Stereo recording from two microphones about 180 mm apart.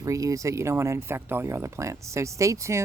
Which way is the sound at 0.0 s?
20° right (ahead or behind).